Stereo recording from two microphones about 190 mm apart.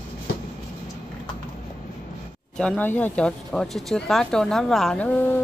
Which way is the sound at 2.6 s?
5° left (ahead or behind).